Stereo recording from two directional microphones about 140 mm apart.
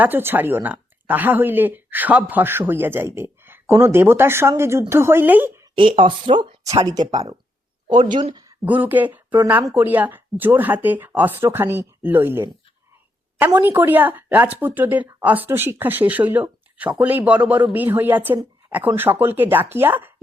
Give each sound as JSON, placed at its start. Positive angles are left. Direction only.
{"t": 0.0, "sound": "speech", "side_deg": -15}
{"t": 5.7, "sound": "speech", "side_deg": -40}
{"t": 8.6, "sound": "speech", "side_deg": -10}
{"t": 13.6, "sound": "speech", "side_deg": -15}